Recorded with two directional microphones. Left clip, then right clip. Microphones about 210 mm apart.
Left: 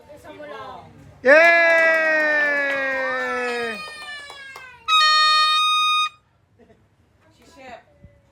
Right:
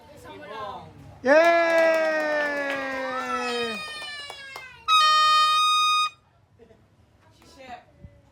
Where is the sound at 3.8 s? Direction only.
15° left (ahead or behind).